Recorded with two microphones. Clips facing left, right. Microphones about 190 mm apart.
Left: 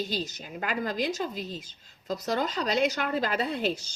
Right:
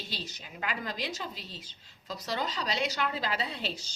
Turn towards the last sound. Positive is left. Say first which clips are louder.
# left 8 dB
turn(degrees=50)  # may be behind; listen again after turning